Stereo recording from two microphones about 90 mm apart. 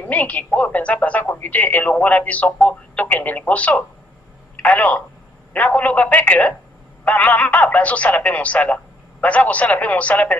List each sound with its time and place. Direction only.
0.1 s speech: 15° left (ahead or behind)